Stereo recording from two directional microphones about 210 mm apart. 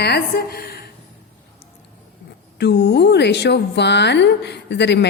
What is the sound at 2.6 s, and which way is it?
Speech, 55° left (ahead or behind).